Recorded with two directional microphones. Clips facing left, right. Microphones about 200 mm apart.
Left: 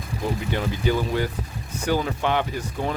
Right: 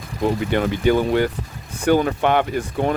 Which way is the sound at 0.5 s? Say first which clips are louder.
Right 6 dB; 60° right (ahead or behind).